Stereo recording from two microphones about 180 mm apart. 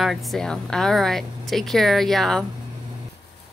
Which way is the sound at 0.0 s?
Centre (ahead or behind).